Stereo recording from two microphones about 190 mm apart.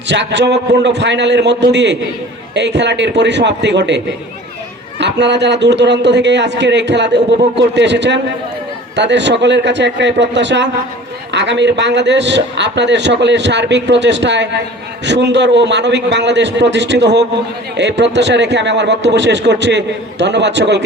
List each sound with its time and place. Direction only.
0.1 s a man's voice: 65° right (ahead or behind)